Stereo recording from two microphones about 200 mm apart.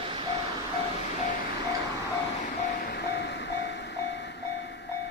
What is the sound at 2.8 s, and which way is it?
Train, 55° left (ahead or behind).